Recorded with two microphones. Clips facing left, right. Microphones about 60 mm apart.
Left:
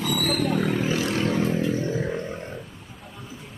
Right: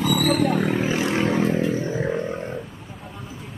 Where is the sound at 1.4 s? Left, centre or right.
Centre.